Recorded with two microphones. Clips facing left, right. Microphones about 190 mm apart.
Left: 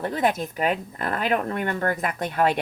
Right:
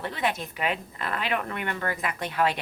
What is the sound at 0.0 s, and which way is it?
Speech, 45° left (ahead or behind).